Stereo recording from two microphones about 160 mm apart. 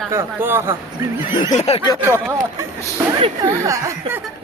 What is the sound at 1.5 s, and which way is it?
Speech, 40° left (ahead or behind).